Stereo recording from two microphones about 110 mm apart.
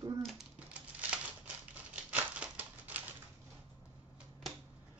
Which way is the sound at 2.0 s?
10° right (ahead or behind).